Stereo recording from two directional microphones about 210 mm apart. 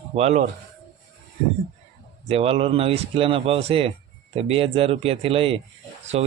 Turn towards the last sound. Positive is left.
turn(degrees=-30)  # may be behind; listen again after turning